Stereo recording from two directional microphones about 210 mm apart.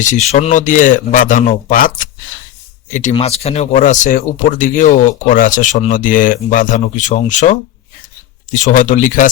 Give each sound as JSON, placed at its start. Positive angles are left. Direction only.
{"t": 0.3, "sound": "speech", "side_deg": 35}
{"t": 8.5, "sound": "speech", "side_deg": 35}